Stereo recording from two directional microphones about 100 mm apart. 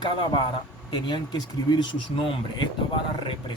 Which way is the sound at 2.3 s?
55° left (ahead or behind).